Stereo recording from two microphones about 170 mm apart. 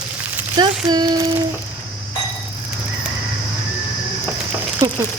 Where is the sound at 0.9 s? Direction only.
25° right (ahead or behind).